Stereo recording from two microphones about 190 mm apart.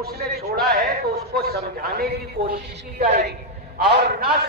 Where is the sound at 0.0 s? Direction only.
55° right (ahead or behind).